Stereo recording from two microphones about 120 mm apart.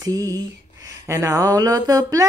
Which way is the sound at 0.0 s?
30° right (ahead or behind).